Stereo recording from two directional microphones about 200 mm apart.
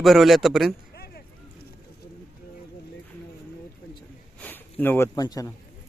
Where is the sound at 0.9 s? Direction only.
50° left (ahead or behind).